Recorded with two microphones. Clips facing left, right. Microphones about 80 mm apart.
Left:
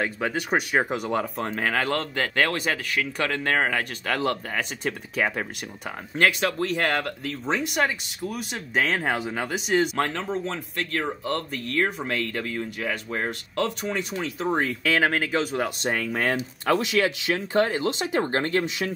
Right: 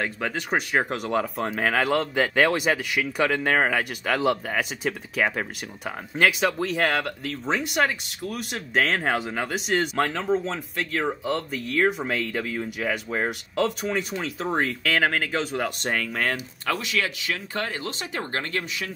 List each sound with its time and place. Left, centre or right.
0.0 s speech: centre
16.6 s speech: left